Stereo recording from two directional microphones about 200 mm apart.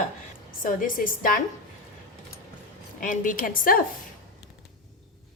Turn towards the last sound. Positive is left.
turn(degrees=45)  # may be behind; listen again after turning